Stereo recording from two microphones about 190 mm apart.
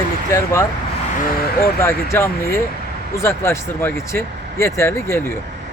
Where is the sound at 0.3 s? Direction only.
15° left (ahead or behind).